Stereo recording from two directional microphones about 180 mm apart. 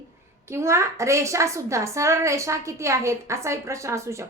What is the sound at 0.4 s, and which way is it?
A woman's voice, 15° right (ahead or behind).